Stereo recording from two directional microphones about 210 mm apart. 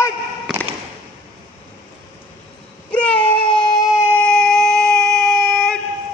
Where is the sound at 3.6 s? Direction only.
20° left (ahead or behind).